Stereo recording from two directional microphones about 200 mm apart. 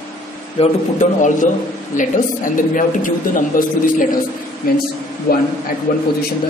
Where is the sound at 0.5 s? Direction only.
35° left (ahead or behind).